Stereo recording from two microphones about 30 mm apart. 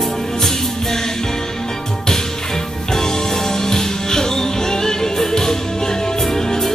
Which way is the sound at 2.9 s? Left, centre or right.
Centre.